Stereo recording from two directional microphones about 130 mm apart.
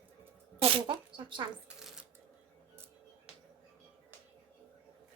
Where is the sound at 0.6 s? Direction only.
45° right (ahead or behind).